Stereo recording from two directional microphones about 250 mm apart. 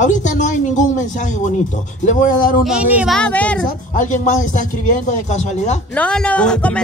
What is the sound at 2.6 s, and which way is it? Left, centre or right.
Speech, centre.